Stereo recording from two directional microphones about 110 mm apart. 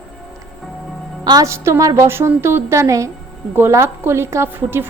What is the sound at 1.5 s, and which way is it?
A woman's voice, 25° right (ahead or behind).